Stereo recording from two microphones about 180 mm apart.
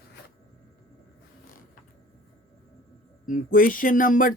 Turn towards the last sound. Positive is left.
turn(degrees=50)  # may be behind; listen again after turning